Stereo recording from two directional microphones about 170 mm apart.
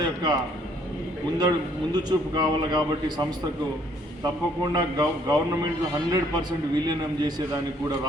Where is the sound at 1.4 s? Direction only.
25° right (ahead or behind).